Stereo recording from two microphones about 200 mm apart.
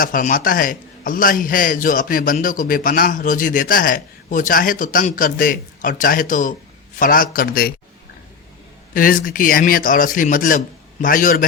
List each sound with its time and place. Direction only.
0.0 s a man's voice: 40° left (ahead or behind)
8.9 s a man's voice: 45° left (ahead or behind)